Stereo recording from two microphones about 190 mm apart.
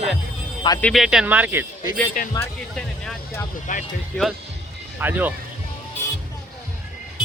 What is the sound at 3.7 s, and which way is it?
Speech, 45° left (ahead or behind).